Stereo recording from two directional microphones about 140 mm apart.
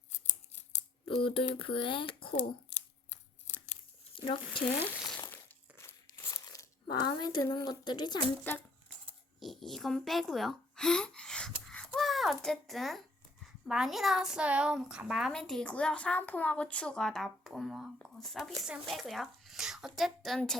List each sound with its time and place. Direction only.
1.0 s speech: 40° left (ahead or behind)
4.2 s speech: 35° left (ahead or behind)
5.3 s crumpling: 15° left (ahead or behind)
6.3 s speech: 25° left (ahead or behind)
8.5 s speech: 15° left (ahead or behind)
9.4 s a woman's voice: centre (ahead or behind)